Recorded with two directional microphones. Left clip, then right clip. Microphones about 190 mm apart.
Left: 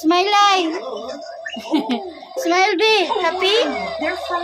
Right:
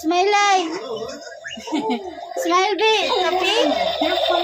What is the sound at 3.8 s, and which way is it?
Speech, 80° right.